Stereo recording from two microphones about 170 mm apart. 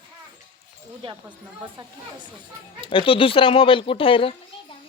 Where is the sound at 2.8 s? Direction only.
30° left (ahead or behind).